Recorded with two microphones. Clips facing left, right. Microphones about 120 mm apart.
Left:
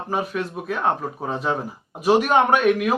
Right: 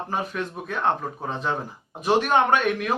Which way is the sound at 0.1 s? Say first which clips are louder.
Left 5 dB; 5° left (ahead or behind).